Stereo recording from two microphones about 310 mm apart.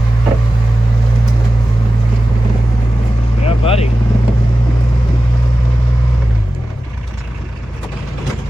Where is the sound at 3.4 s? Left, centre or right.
Centre.